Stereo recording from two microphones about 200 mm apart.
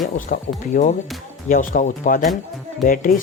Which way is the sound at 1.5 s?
45° left (ahead or behind).